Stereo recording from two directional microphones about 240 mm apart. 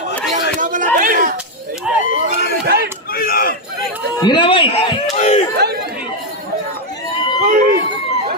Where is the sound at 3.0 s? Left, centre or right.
Left.